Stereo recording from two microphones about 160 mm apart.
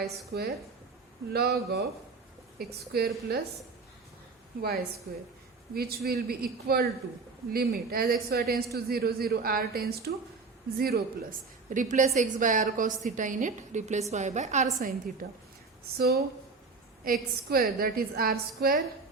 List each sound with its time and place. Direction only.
0.3 s a woman's voice: 75° right (ahead or behind)
5.1 s a woman's voice: 75° right (ahead or behind)
16.0 s a woman's voice: 75° right (ahead or behind)
17.0 s a woman's voice: 65° right (ahead or behind)